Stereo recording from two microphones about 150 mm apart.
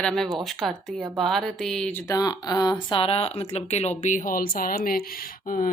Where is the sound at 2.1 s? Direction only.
25° left (ahead or behind).